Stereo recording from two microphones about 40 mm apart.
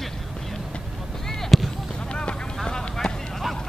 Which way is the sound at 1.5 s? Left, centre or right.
Centre.